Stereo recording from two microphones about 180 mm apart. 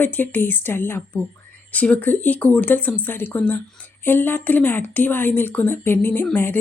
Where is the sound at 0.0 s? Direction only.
10° left (ahead or behind).